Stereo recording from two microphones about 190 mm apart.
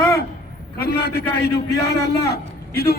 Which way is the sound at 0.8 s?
60° left (ahead or behind).